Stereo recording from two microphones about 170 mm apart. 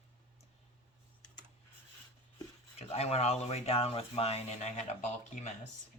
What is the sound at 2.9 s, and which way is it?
Speech, 35° left (ahead or behind).